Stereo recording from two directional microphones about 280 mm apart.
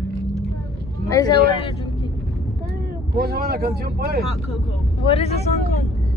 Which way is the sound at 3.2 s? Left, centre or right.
Right.